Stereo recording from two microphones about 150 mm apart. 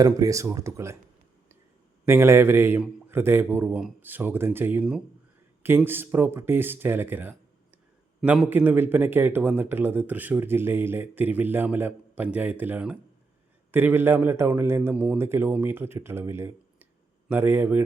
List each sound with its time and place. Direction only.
0.0 s speech: 20° right (ahead or behind)
2.0 s speech: 15° right (ahead or behind)